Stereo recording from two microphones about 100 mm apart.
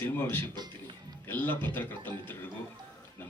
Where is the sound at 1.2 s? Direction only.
20° left (ahead or behind).